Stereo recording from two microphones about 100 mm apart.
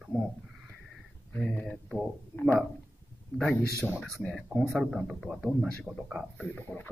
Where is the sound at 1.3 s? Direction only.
20° left (ahead or behind).